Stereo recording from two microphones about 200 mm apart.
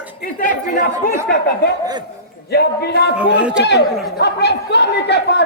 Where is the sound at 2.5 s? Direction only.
55° left (ahead or behind).